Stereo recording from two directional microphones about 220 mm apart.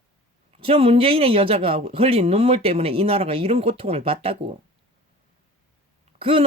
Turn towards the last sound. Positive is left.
turn(degrees=-25)  # may be behind; listen again after turning